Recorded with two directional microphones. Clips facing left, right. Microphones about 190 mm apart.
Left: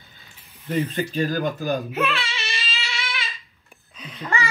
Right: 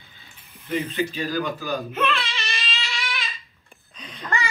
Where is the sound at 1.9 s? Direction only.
5° left (ahead or behind).